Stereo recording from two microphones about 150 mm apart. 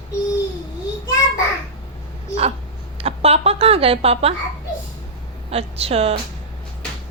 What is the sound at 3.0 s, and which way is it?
A woman's voice, 40° right (ahead or behind).